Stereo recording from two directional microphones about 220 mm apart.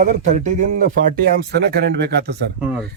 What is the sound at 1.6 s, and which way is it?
Speech, 45° right (ahead or behind).